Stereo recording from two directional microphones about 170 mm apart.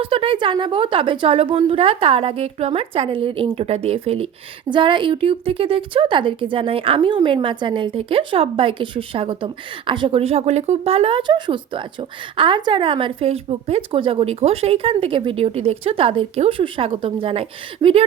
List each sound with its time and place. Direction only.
0.0 s a woman's voice: 30° right (ahead or behind)